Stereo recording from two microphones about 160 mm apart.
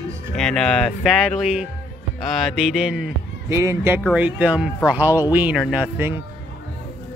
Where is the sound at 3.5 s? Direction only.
20° right (ahead or behind).